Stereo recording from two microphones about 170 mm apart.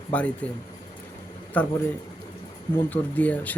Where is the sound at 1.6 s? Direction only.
10° left (ahead or behind).